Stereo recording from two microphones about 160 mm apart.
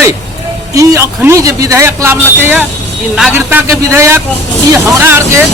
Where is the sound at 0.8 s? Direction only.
15° right (ahead or behind).